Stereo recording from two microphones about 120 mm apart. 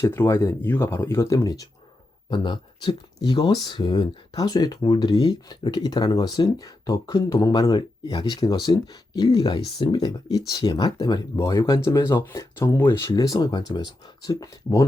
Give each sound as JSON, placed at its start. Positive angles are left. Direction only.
{"t": 0.0, "sound": "speech", "side_deg": 20}
{"t": 2.3, "sound": "speech", "side_deg": 40}